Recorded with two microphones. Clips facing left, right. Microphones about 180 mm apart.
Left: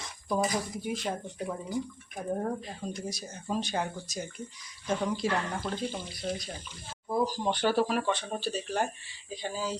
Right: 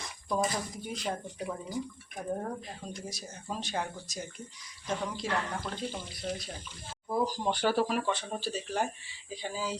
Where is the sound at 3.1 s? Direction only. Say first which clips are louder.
Left 5 dB; centre (ahead or behind).